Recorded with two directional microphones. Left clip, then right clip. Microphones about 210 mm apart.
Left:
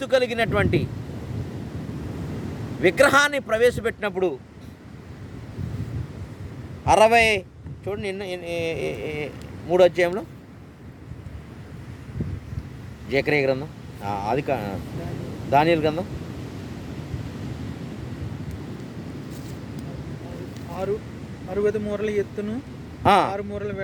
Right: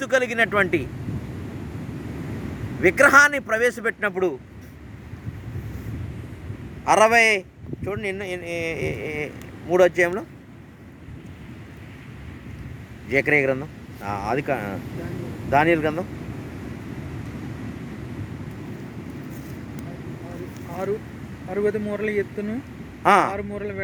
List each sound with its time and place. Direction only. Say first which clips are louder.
0.0 s speech: right 1 dB; 5° right (ahead or behind)
2.8 s speech: right 3 dB; centre (ahead or behind)
6.8 s speech: even; 5° right (ahead or behind)
13.1 s speech: right 2 dB; centre (ahead or behind)
21.5 s speech: even; 30° right (ahead or behind)
23.0 s speech: right 1 dB; centre (ahead or behind)
23.3 s speech: even; 25° right (ahead or behind)